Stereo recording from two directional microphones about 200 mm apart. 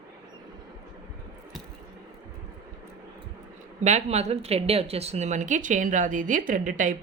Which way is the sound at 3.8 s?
35° right (ahead or behind).